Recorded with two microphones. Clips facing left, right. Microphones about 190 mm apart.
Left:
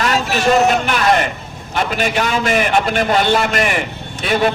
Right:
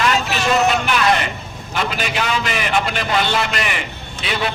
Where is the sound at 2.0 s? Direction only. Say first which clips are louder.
Left 4 dB; 50° left (ahead or behind).